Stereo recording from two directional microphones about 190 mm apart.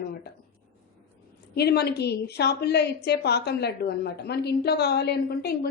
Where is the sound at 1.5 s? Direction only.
55° left (ahead or behind).